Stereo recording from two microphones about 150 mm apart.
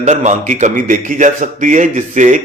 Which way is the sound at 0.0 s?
50° right (ahead or behind).